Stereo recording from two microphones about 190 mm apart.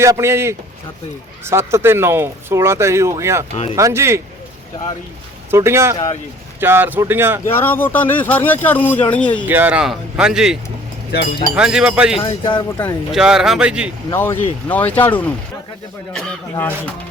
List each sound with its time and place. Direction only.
0.0 s speech: 15° right (ahead or behind)
5.5 s speech: 15° right (ahead or behind)
7.4 s speech: 10° left (ahead or behind)
9.5 s speech: 10° right (ahead or behind)
11.1 s speech: 60° left (ahead or behind)
11.5 s speech: 5° right (ahead or behind)
12.2 s speech: 25° left (ahead or behind)
12.8 s speech: centre (ahead or behind)
14.1 s speech: 15° left (ahead or behind)